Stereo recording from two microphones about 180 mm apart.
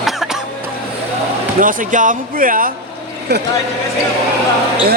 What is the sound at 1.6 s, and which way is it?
Speech, 45° right (ahead or behind).